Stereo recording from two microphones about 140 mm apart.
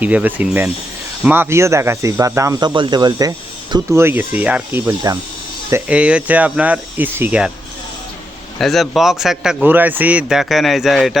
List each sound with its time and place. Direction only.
0.0 s speech: 10° right (ahead or behind)
8.5 s a man's voice: centre (ahead or behind)